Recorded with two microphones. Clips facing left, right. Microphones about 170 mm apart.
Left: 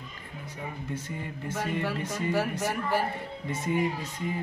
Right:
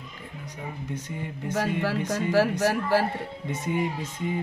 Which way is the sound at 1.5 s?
90° right.